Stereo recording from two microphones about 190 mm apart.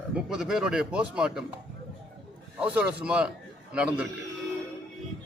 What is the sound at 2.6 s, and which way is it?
A man's voice, 5° right (ahead or behind).